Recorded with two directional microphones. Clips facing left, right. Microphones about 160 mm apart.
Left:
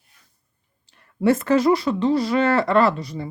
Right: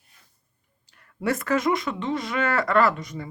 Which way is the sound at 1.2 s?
25° left (ahead or behind).